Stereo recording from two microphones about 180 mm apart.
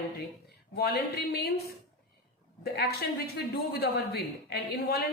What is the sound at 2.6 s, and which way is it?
Speech, 60° left (ahead or behind).